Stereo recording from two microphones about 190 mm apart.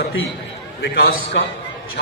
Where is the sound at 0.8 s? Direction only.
55° left (ahead or behind).